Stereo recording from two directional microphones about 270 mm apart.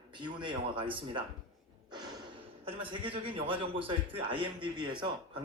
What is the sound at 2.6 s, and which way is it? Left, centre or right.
A man's voice, centre.